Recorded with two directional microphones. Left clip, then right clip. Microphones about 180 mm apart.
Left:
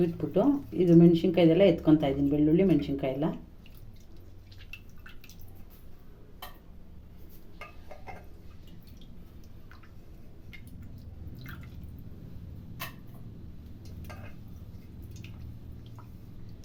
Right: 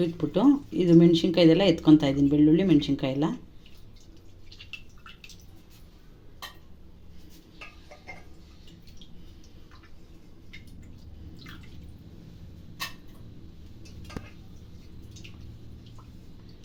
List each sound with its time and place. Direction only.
0.2 s speech: 45° right (ahead or behind)